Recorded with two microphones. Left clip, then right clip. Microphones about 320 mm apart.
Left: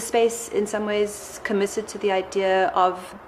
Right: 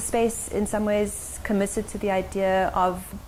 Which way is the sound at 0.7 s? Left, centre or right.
Right.